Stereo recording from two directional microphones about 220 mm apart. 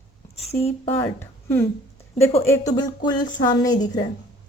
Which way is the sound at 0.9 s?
10° left (ahead or behind).